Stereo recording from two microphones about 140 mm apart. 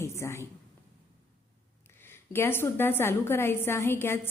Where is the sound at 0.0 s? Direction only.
20° left (ahead or behind).